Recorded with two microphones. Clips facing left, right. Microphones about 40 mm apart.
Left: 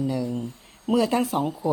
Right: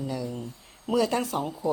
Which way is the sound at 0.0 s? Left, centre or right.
Centre.